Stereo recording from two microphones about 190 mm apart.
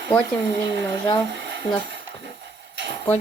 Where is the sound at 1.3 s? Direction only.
75° right (ahead or behind).